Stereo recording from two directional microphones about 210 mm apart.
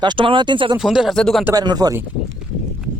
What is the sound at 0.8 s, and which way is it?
Speech, centre (ahead or behind).